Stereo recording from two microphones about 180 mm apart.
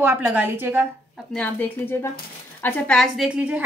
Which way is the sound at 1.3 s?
10° left (ahead or behind).